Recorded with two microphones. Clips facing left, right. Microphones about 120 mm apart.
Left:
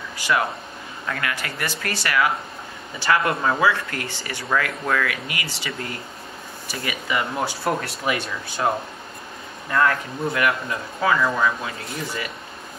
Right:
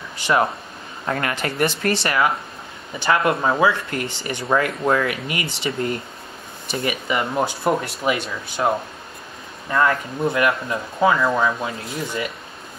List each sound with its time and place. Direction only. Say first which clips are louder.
0.2 s speech: right 3 dB; 30° right (ahead or behind); by 9.9 s 10° right (ahead or behind)
10.2 s speech: right 3 dB; 20° right (ahead or behind)